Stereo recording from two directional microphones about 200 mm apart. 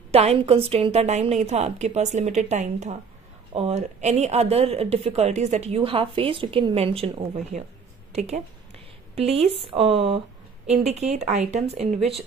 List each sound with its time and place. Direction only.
0.1 s a woman's voice: 30° right (ahead or behind)